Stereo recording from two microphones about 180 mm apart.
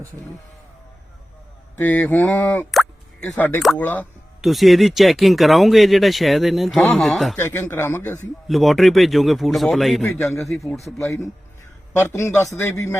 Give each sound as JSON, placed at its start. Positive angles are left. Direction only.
{"t": 1.7, "sound": "speech", "side_deg": 10}
{"t": 2.7, "sound": "music", "side_deg": 5}
{"t": 3.6, "sound": "speech", "side_deg": 5}
{"t": 7.3, "sound": "speech", "side_deg": 10}
{"t": 8.4, "sound": "speech", "side_deg": 0}
{"t": 10.9, "sound": "speech", "side_deg": 15}